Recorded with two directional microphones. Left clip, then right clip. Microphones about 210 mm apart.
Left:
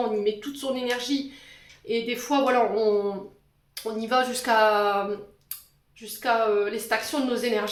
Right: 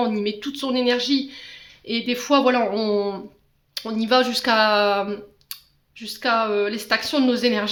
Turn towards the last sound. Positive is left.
turn(degrees=-45)  # may be behind; listen again after turning